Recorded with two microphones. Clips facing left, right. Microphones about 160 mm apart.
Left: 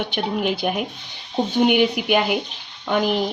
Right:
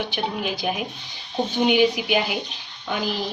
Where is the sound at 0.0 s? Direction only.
55° left (ahead or behind).